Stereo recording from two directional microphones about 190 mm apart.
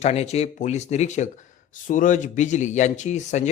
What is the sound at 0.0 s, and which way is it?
Speech, 35° left (ahead or behind).